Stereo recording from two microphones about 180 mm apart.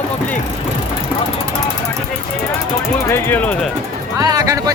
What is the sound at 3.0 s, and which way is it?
Speech, 10° left (ahead or behind).